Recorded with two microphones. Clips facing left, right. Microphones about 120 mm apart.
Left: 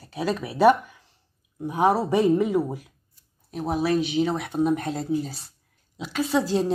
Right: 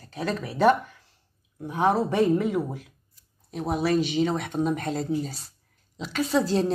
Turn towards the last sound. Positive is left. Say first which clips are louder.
# even
turn(degrees=0)  # may be behind; listen again after turning